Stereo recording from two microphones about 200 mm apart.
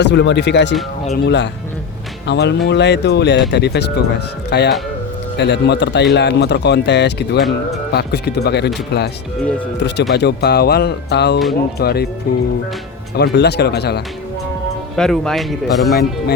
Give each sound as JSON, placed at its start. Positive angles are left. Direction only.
{"t": 0.0, "sound": "speech", "side_deg": 60}
{"t": 14.9, "sound": "speech", "side_deg": 5}
{"t": 15.9, "sound": "speech", "side_deg": 50}